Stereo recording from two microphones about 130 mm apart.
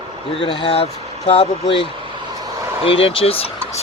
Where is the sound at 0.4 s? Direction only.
45° left (ahead or behind).